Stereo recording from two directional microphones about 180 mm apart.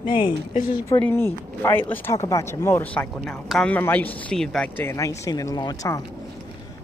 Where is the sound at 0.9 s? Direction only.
15° left (ahead or behind).